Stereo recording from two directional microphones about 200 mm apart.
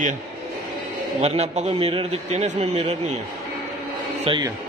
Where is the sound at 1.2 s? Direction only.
30° right (ahead or behind).